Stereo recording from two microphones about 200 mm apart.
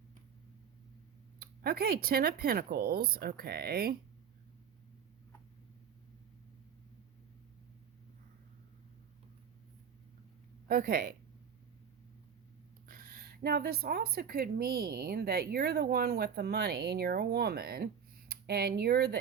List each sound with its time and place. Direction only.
1.4 s a woman's voice: 50° right (ahead or behind)
10.7 s a woman's voice: 45° right (ahead or behind)
12.9 s a woman's voice: 45° right (ahead or behind)